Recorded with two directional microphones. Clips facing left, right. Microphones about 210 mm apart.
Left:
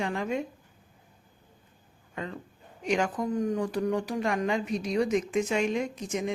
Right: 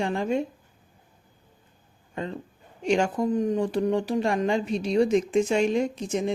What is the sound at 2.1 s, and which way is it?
Speech, 30° right (ahead or behind).